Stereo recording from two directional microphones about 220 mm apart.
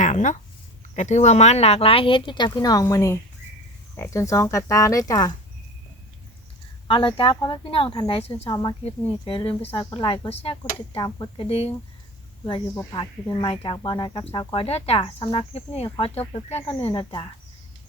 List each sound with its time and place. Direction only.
0.0 s a sound: 35° left (ahead or behind)
0.9 s speech: 30° left (ahead or behind); by 5.3 s 15° left (ahead or behind)
6.8 s speech: 25° left (ahead or behind)
12.7 s speech: 15° left (ahead or behind)